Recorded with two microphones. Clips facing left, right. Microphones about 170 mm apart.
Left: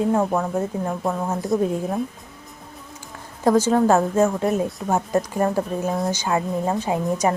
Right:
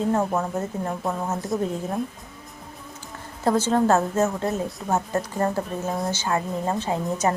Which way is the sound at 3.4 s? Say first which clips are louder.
Left 3 dB; 10° left (ahead or behind).